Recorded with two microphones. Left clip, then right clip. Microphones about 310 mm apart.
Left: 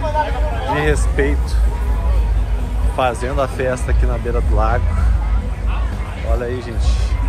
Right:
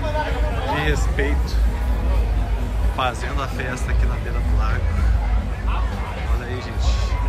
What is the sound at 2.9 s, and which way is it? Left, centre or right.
Speech, centre.